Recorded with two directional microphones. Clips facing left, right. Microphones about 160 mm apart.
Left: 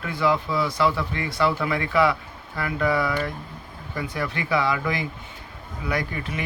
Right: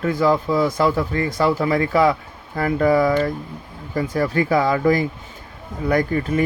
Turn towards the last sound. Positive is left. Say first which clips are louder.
# right 9 dB
turn(degrees=-50)  # may be behind; listen again after turning